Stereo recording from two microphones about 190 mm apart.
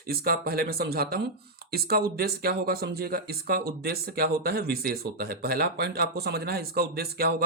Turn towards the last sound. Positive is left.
turn(degrees=-55)  # may be behind; listen again after turning